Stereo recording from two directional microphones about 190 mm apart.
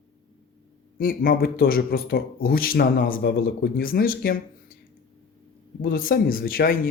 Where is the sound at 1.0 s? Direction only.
50° left (ahead or behind).